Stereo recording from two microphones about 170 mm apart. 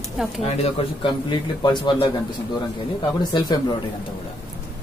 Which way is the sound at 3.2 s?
25° left (ahead or behind).